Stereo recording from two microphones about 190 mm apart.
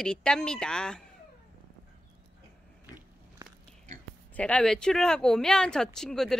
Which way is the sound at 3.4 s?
20° right (ahead or behind).